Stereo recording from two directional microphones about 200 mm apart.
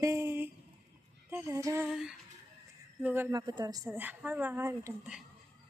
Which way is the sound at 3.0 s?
10° right (ahead or behind).